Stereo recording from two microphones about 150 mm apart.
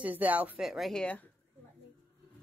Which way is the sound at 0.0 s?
10° right (ahead or behind).